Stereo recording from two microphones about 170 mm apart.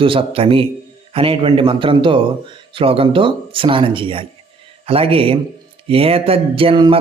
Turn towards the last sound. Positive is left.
turn(degrees=-30)  # may be behind; listen again after turning